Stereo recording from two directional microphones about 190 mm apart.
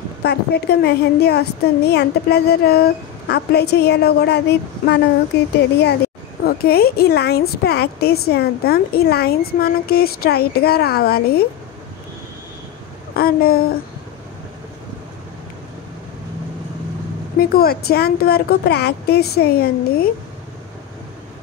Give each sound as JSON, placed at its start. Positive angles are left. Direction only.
{"t": 0.2, "sound": "speech", "side_deg": 60}
{"t": 13.1, "sound": "speech", "side_deg": 55}
{"t": 17.4, "sound": "speech", "side_deg": 55}